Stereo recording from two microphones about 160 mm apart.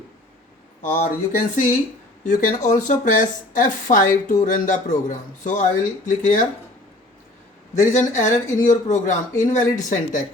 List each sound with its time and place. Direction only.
0.8 s speech: 50° left (ahead or behind)
7.8 s speech: 50° left (ahead or behind)